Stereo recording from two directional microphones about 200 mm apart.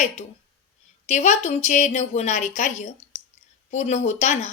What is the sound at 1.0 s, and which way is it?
A woman's voice, 35° left (ahead or behind).